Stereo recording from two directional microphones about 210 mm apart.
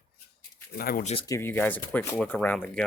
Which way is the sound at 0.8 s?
45° left (ahead or behind).